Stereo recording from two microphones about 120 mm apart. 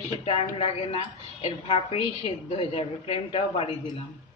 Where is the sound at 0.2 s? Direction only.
55° left (ahead or behind).